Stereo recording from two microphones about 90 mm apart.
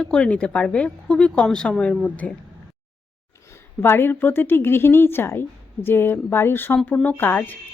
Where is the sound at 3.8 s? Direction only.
25° left (ahead or behind).